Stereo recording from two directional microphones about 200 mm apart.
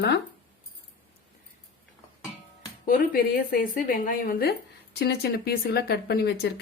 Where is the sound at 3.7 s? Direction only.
40° left (ahead or behind).